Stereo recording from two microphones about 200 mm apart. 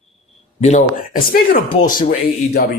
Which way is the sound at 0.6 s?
35° left (ahead or behind).